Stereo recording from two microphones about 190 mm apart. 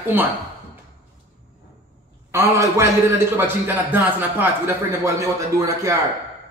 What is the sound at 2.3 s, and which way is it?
Speech, 15° right (ahead or behind).